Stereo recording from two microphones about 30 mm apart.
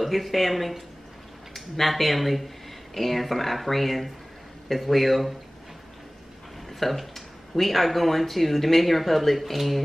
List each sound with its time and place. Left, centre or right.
0.0 s speech: centre
6.8 s speech: centre